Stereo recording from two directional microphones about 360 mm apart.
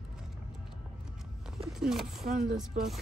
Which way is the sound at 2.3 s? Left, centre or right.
Right.